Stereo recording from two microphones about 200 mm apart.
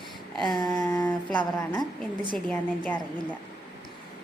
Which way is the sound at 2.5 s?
5° left (ahead or behind).